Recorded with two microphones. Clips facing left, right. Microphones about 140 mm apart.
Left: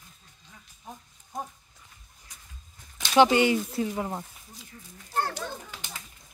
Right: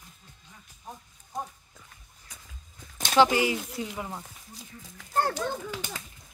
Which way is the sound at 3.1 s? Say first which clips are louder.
Left 2 dB; 25° left (ahead or behind).